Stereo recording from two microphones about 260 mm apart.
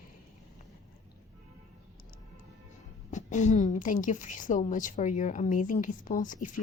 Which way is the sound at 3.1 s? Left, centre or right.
Left.